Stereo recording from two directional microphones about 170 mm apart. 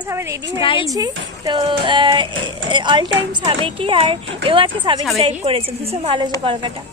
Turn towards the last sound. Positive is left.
turn(degrees=-35)  # may be behind; listen again after turning